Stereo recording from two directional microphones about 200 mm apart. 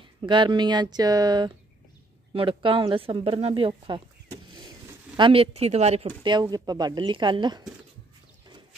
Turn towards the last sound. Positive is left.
turn(degrees=-25)  # may be behind; listen again after turning